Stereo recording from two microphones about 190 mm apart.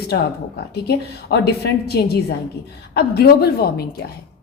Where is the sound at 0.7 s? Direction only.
60° left (ahead or behind).